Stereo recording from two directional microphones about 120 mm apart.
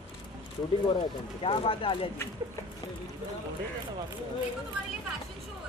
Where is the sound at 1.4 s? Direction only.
50° left (ahead or behind).